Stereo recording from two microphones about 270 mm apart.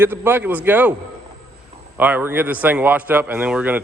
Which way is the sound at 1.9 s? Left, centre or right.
Centre.